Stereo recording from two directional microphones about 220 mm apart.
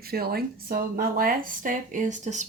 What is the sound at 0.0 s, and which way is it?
Speech, 45° right (ahead or behind).